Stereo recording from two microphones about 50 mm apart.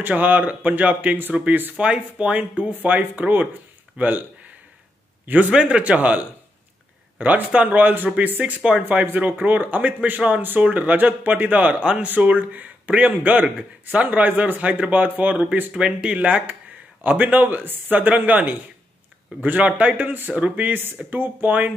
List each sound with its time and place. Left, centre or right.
0.1 s speech: right
2.7 s a man's voice: right
5.5 s speech: right
11.8 s speech: right
12.1 s speech: right
15.7 s speech: centre
19.6 s speech: right